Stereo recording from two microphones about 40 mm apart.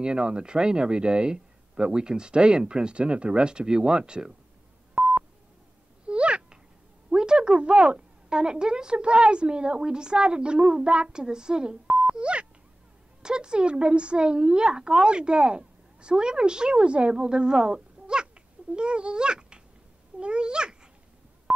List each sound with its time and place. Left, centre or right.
0.0 s speech: right
4.9 s telephone dialing: right
6.0 s a sound: right
7.1 s a woman's voice: centre
21.5 s telephone dialing: centre